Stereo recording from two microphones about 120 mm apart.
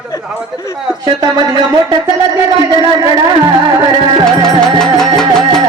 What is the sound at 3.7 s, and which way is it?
Speech, 40° right (ahead or behind).